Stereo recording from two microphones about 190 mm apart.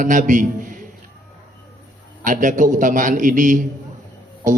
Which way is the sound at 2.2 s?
45° right (ahead or behind).